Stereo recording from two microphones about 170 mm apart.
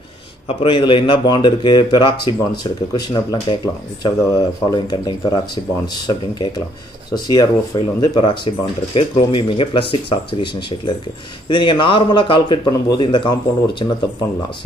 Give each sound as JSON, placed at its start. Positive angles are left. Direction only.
{"t": 0.5, "sound": "speech", "side_deg": 30}